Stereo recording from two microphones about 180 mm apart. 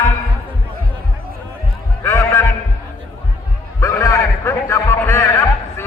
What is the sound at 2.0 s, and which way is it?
Speech, 15° left (ahead or behind).